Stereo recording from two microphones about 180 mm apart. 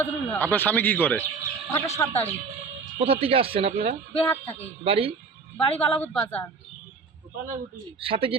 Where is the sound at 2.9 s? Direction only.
30° right (ahead or behind).